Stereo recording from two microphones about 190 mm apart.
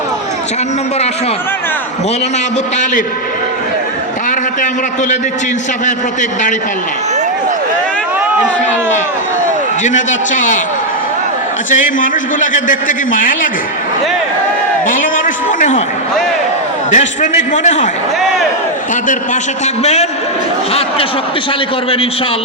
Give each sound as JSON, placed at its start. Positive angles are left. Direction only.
{"t": 4.3, "sound": "a man's voice", "side_deg": 40}
{"t": 9.8, "sound": "a man's voice", "side_deg": 40}
{"t": 11.7, "sound": "a man's voice", "side_deg": 45}
{"t": 14.8, "sound": "a sound", "side_deg": 45}
{"t": 16.9, "sound": "a man's voice", "side_deg": 40}
{"t": 19.0, "sound": "a man's voice", "side_deg": 40}